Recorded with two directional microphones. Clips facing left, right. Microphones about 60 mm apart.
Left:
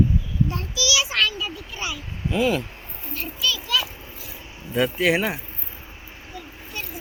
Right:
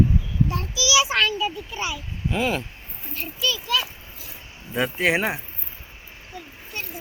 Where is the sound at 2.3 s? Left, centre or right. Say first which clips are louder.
Left 3 dB; right.